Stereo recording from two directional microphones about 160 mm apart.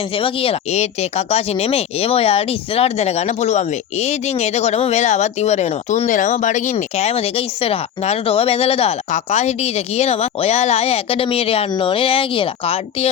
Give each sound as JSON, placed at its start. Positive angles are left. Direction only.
{"t": 0.1, "sound": "speech", "side_deg": 35}